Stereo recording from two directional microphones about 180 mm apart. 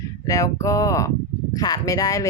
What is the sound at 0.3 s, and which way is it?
Speech, 15° left (ahead or behind).